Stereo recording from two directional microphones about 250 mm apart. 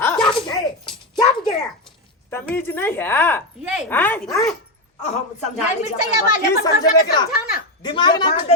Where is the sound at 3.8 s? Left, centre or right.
Centre.